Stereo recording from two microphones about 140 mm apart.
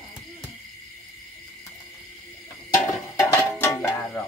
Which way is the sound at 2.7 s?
20° left (ahead or behind).